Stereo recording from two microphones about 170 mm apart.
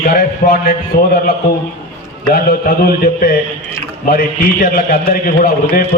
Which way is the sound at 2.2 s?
60° left (ahead or behind).